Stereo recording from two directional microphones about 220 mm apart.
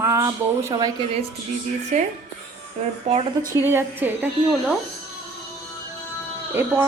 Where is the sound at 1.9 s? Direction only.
30° right (ahead or behind).